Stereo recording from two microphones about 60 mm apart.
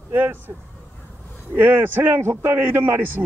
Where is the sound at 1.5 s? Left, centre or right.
Right.